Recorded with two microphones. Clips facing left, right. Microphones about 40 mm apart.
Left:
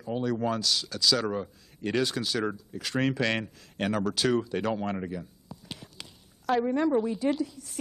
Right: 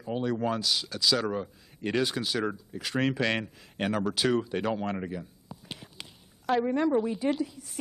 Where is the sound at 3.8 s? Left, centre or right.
Centre.